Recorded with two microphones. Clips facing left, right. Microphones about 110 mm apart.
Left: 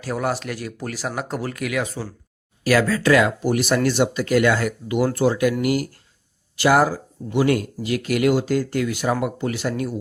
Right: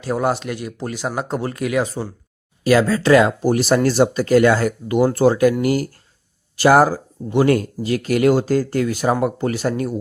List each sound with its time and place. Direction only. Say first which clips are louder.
0.0 s speech: right 4 dB; 25° right (ahead or behind); by 9.9 s 40° right (ahead or behind)